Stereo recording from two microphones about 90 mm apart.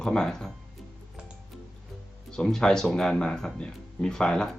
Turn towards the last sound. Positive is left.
turn(degrees=10)  # may be behind; listen again after turning